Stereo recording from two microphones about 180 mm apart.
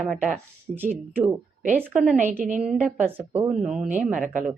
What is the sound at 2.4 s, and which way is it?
Speech, 45° right (ahead or behind).